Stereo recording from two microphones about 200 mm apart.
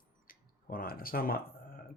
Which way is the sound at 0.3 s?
45° left (ahead or behind).